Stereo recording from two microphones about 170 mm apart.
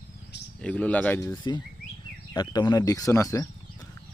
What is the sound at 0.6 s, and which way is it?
Speech, 5° left (ahead or behind).